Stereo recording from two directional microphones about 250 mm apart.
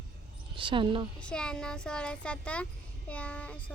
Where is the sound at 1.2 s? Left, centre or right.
Centre.